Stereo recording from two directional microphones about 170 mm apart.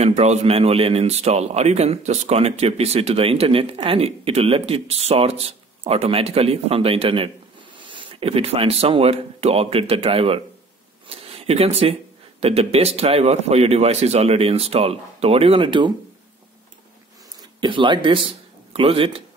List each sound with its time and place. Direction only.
0.0 s a man's voice: 40° right (ahead or behind)
11.1 s a sound: 35° right (ahead or behind)
12.4 s a man's voice: 35° right (ahead or behind)
17.6 s speech: 30° right (ahead or behind)